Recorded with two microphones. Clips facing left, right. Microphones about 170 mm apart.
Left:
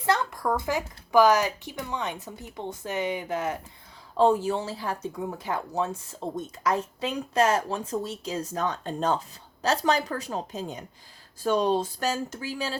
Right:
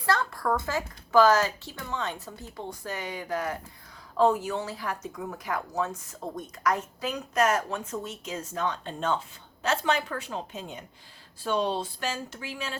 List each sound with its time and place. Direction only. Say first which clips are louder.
0.0 s a child's voice: left 2 dB; 20° left (ahead or behind); by 12.7 s 35° left (ahead or behind)